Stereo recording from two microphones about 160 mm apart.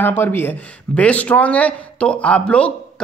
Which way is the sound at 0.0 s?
15° left (ahead or behind).